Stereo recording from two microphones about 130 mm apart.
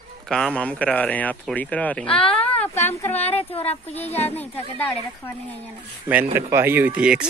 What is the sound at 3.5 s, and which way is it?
Speech, 50° left (ahead or behind).